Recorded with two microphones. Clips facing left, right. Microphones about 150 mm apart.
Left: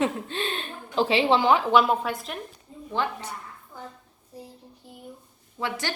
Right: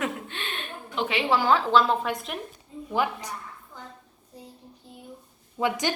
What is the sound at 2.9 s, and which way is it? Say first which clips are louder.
Speech: right 2 dB; 10° right (ahead or behind).